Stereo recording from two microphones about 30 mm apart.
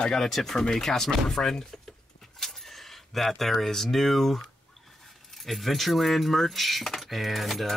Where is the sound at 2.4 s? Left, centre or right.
Centre.